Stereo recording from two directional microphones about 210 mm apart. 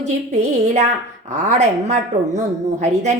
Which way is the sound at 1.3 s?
35° right (ahead or behind).